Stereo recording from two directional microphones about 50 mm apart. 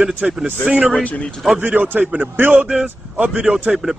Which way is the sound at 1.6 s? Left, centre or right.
Right.